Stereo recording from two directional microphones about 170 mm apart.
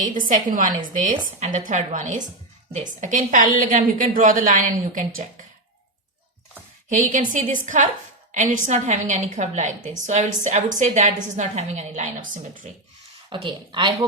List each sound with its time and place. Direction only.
0.0 s a woman's voice: 50° right (ahead or behind)
6.9 s a woman's voice: 45° right (ahead or behind)
13.3 s speech: 25° right (ahead or behind)